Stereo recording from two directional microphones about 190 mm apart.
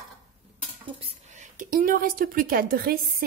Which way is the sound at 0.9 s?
35° right (ahead or behind).